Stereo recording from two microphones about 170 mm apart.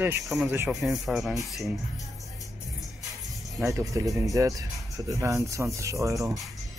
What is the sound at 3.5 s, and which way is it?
Speech, 15° right (ahead or behind).